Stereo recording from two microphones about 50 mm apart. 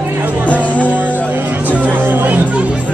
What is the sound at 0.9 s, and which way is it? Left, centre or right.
Music, right.